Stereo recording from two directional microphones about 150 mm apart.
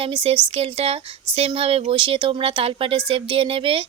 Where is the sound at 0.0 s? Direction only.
40° right (ahead or behind).